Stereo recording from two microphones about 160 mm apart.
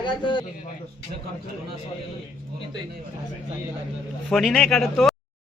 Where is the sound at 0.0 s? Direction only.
30° left (ahead or behind).